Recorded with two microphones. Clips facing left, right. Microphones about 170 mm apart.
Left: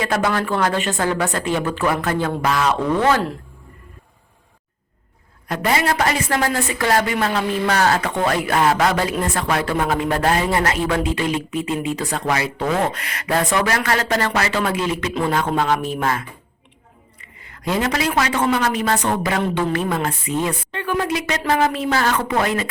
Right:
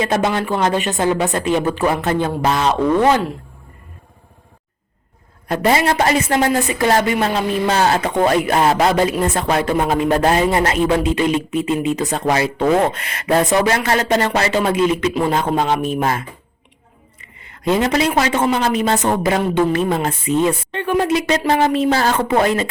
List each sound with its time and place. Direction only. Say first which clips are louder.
0.0 s a man's voice: right 2 dB; 20° right (ahead or behind)
5.5 s a man's voice: right 4 dB; 30° right (ahead or behind)